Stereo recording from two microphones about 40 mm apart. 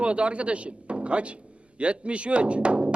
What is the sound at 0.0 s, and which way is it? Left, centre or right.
Speech, right.